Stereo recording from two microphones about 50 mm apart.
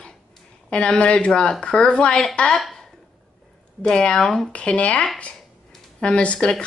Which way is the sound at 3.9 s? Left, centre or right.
Centre.